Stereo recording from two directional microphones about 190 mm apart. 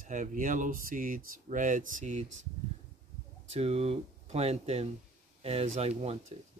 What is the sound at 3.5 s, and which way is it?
Speech, 30° right (ahead or behind).